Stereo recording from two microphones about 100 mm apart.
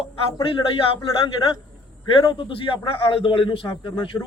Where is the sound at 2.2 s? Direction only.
60° left (ahead or behind).